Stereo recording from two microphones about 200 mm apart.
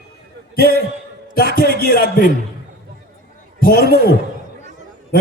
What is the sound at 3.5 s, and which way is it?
Speech, 45° left (ahead or behind).